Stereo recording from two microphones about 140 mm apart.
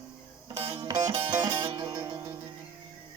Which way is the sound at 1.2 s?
35° right (ahead or behind).